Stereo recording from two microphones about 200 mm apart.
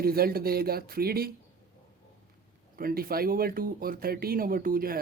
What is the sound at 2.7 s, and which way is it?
Speech, 45° right (ahead or behind).